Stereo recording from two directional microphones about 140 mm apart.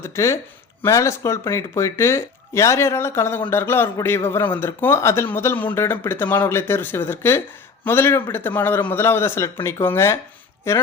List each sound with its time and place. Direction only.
0.0 s a man's voice: 20° left (ahead or behind)